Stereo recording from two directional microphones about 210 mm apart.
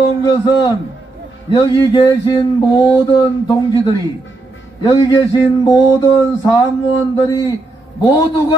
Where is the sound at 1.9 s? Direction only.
20° left (ahead or behind).